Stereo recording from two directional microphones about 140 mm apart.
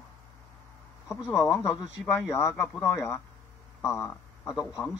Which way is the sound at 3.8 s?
20° left (ahead or behind).